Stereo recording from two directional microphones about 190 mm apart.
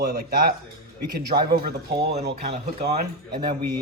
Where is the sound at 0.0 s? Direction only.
50° right (ahead or behind).